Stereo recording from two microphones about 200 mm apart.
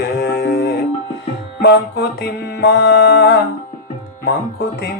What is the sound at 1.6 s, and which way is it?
Music, 55° left (ahead or behind).